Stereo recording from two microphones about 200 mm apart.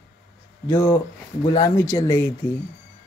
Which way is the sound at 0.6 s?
10° left (ahead or behind).